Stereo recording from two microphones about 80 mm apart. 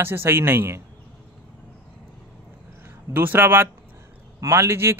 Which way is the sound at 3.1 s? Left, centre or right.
Right.